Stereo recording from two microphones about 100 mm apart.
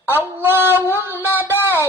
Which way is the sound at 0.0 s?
20° right (ahead or behind).